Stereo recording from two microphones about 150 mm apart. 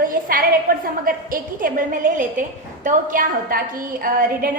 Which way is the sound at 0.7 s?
70° right (ahead or behind).